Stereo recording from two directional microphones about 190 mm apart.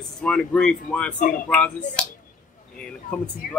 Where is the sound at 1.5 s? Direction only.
10° left (ahead or behind).